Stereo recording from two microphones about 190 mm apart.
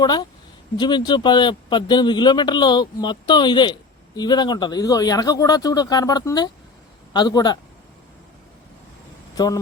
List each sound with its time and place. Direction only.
0.0 s speech: 20° left (ahead or behind)
9.3 s speech: 20° left (ahead or behind)